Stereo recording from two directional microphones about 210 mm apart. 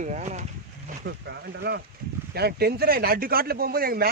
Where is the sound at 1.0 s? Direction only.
50° right (ahead or behind).